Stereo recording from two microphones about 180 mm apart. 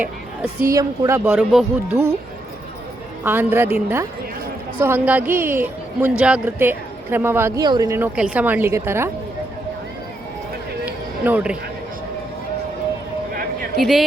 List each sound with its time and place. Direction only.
0.7 s a man's voice: 20° right (ahead or behind); by 2.0 s 5° right (ahead or behind)
3.2 s a man's voice: 10° right (ahead or behind)
10.8 s a sound: 10° right (ahead or behind)
13.7 s speech: centre (ahead or behind)